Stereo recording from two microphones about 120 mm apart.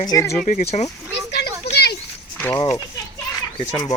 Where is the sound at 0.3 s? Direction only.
90° left; by 0.9 s 65° left (ahead or behind).